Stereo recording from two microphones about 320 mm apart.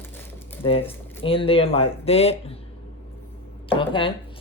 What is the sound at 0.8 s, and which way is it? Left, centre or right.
Speech, centre.